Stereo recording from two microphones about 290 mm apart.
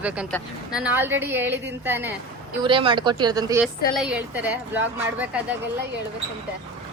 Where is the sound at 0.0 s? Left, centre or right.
Centre.